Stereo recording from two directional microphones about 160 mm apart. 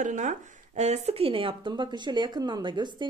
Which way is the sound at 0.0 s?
50° right (ahead or behind).